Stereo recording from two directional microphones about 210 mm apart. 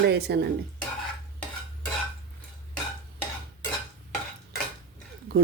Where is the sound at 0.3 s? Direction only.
50° right (ahead or behind).